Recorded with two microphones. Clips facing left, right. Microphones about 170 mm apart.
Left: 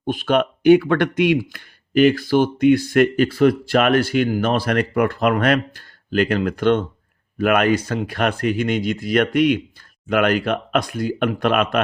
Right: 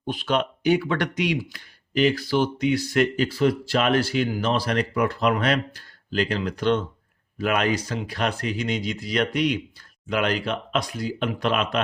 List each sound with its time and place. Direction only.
0.0 s speech: 50° left (ahead or behind)